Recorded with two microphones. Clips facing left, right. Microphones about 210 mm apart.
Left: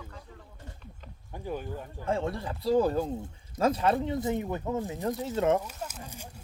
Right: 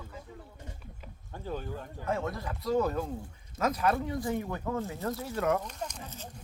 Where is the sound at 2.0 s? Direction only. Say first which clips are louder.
Left 3 dB; 30° left (ahead or behind).